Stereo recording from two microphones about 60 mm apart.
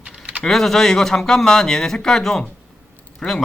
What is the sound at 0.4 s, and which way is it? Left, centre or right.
Speech, centre.